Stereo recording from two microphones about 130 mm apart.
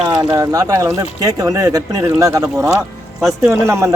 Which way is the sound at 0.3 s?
25° right (ahead or behind).